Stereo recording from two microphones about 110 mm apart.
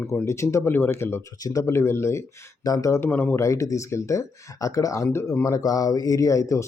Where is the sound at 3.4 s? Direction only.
30° left (ahead or behind).